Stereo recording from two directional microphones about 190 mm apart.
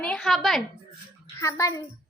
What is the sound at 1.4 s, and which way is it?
Speech, 15° left (ahead or behind).